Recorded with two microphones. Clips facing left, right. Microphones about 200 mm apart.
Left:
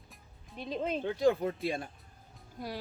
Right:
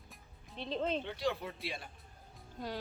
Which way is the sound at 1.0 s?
45° left (ahead or behind).